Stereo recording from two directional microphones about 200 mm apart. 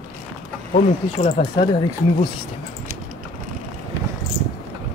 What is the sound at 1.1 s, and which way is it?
Speech, 30° left (ahead or behind).